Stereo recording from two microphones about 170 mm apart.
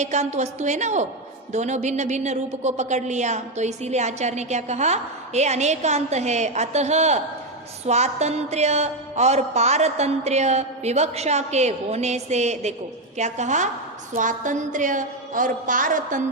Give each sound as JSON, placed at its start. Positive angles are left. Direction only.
{"t": 0.0, "sound": "a woman's voice", "side_deg": -40}